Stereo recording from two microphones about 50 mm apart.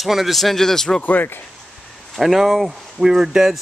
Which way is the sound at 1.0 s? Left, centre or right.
Left.